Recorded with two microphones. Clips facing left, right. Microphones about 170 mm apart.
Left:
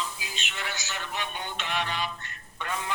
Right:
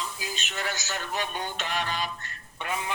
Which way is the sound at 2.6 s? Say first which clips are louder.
Right 1 dB; 20° right (ahead or behind).